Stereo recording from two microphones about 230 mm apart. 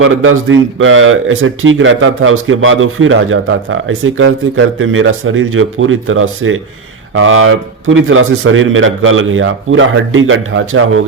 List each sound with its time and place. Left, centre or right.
0.0 s speech: right